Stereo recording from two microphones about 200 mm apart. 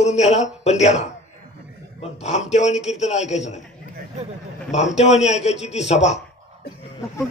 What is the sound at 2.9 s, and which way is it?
Speech, 35° left (ahead or behind).